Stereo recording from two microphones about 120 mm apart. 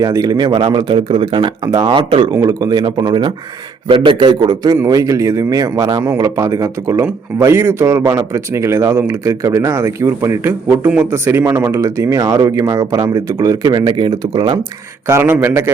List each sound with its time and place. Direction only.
0.0 s speech: 30° right (ahead or behind)
1.6 s speech: 35° right (ahead or behind)
2.3 s speech: 30° right (ahead or behind)
15.0 s speech: 20° right (ahead or behind)